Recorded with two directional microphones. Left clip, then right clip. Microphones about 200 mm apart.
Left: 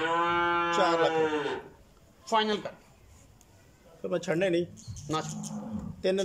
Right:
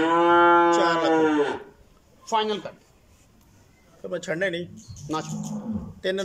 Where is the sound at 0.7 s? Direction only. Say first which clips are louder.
Right 4 dB; 10° left (ahead or behind).